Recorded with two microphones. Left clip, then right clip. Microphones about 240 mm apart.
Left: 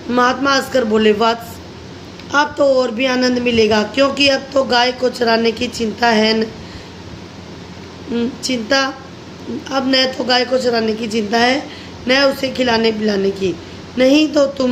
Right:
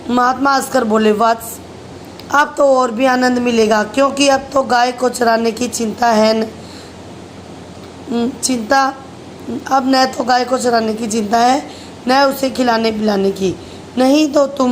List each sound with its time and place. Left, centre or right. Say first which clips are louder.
0.1 s speech: right 1 dB; centre
8.1 s speech: right 2 dB; centre